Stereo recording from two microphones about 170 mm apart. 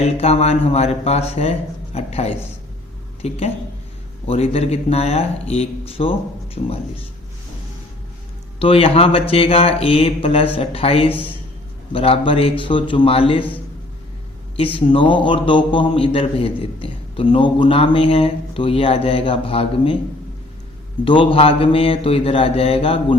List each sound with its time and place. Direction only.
0.0 s a man's voice: 35° left (ahead or behind)
8.5 s a man's voice: 35° left (ahead or behind)
14.6 s a man's voice: 35° left (ahead or behind)
21.0 s a man's voice: 30° left (ahead or behind)